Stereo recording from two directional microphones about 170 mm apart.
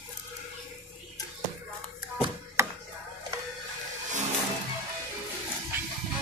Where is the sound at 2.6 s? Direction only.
15° right (ahead or behind).